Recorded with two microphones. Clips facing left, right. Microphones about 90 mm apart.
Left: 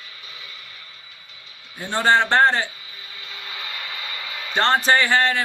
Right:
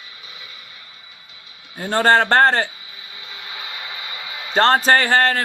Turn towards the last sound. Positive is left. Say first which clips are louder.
# right 2 dB
turn(degrees=-40)  # may be behind; listen again after turning